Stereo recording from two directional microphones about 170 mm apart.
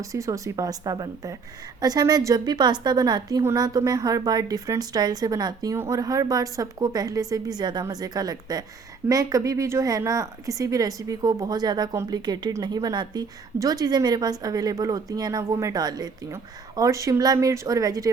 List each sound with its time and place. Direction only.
0.0 s a woman's voice: 20° right (ahead or behind)